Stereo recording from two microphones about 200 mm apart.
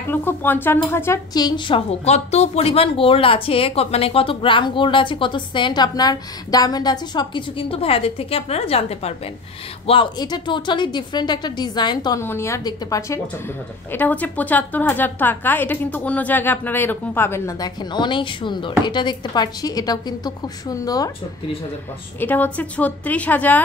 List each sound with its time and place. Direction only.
0.1 s a woman's voice: 10° left (ahead or behind)
22.2 s a woman's voice: 10° left (ahead or behind)